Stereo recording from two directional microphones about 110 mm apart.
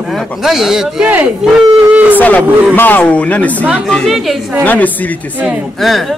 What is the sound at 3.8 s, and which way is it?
Speech, centre (ahead or behind).